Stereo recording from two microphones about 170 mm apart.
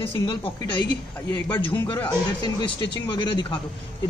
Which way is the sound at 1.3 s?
15° left (ahead or behind).